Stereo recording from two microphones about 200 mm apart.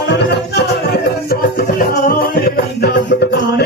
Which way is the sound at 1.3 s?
50° left (ahead or behind).